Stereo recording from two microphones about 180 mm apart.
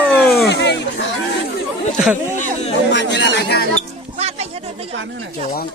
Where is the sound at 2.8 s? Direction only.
80° left.